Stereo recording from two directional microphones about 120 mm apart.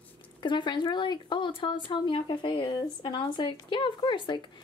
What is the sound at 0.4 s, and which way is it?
A woman's voice, 40° left (ahead or behind).